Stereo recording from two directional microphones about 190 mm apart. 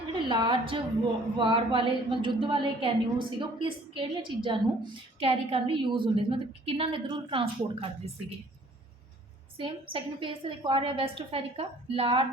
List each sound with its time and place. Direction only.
0.3 s a woman's voice: 25° right (ahead or behind)
9.6 s a woman's voice: 25° right (ahead or behind)